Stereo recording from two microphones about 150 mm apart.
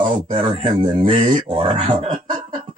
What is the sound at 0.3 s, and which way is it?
Speech, 35° right (ahead or behind).